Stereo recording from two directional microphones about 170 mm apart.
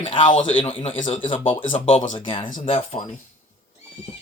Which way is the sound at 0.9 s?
45° left (ahead or behind).